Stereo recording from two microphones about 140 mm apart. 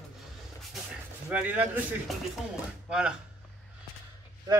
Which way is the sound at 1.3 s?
10° right (ahead or behind).